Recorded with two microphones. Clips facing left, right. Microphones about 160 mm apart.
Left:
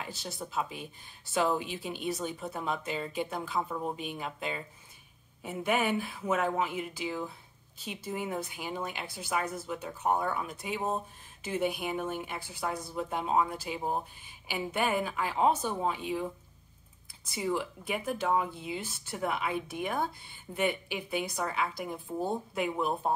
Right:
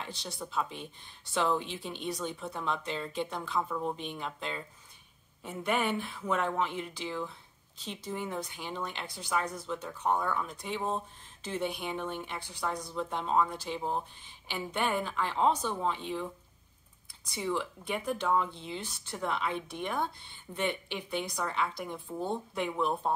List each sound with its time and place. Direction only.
0.0 s a woman's voice: 5° left (ahead or behind)